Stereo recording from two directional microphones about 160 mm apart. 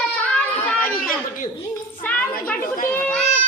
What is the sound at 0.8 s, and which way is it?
Chatter, 65° left (ahead or behind).